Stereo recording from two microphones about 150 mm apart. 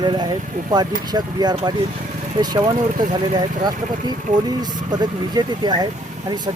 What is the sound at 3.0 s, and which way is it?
Speech, 30° right (ahead or behind).